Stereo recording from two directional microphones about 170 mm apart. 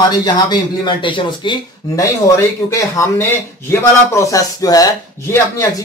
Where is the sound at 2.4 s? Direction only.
20° left (ahead or behind).